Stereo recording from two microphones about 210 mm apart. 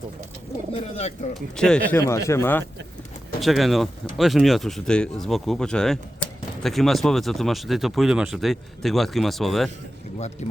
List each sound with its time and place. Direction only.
0.7 s speech: 30° left (ahead or behind)
1.3 s speech: 5° left (ahead or behind)
3.4 s speech: centre (ahead or behind)
10.4 s speech: 30° left (ahead or behind)